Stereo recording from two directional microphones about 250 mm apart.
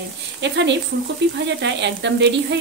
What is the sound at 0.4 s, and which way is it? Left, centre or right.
Speech, right.